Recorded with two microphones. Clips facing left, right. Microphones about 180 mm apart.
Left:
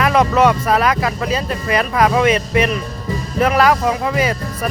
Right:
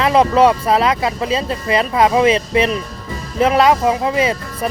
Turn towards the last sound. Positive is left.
turn(degrees=-25)  # may be behind; listen again after turning